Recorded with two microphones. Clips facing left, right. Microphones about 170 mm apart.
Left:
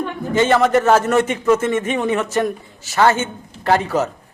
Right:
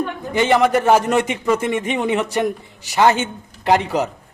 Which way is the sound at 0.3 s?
15° right (ahead or behind).